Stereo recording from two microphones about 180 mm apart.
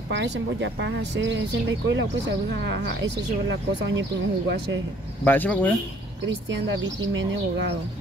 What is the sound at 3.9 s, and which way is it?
Speech, 90° right.